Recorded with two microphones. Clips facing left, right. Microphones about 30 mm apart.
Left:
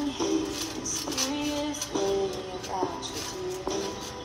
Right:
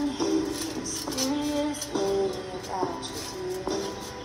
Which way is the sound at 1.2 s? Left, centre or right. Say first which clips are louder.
Right 3 dB; left.